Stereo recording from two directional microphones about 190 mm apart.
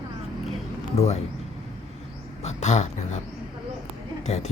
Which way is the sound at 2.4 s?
35° left (ahead or behind).